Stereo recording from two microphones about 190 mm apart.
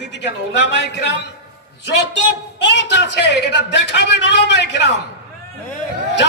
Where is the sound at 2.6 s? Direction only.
70° left (ahead or behind).